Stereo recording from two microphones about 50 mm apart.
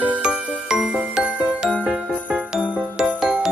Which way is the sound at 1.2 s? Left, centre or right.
Right.